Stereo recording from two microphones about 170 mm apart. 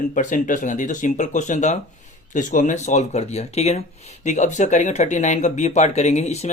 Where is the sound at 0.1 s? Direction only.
50° left (ahead or behind).